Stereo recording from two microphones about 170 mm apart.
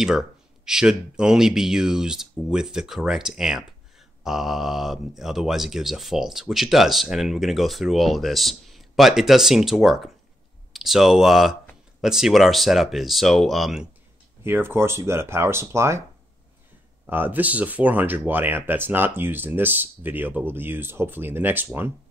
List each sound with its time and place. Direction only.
0.7 s speech: 5° right (ahead or behind)
14.4 s speech: 15° right (ahead or behind)
17.0 s speech: 10° right (ahead or behind)